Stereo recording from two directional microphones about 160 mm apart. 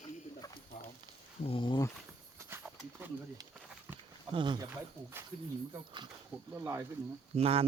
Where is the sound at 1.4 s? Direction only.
35° left (ahead or behind).